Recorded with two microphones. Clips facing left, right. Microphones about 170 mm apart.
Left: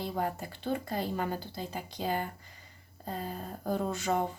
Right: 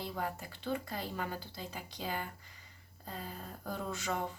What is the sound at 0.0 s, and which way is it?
Speech, 40° left (ahead or behind).